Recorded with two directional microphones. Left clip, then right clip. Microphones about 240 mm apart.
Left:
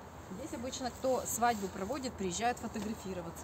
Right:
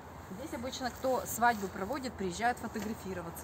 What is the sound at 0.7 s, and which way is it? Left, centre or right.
Speech, centre.